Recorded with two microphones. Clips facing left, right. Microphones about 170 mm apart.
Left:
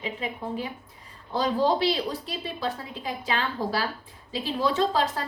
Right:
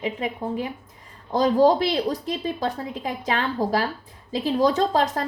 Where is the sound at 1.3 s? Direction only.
40° right (ahead or behind).